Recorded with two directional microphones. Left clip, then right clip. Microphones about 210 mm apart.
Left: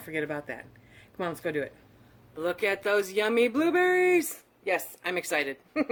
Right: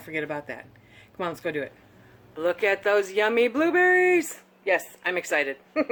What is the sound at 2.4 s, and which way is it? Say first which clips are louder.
Speech: right 4 dB; 40° left (ahead or behind).